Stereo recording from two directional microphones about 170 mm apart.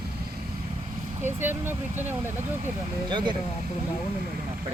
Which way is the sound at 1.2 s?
10° right (ahead or behind).